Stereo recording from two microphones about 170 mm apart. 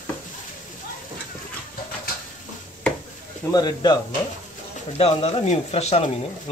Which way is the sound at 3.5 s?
25° left (ahead or behind).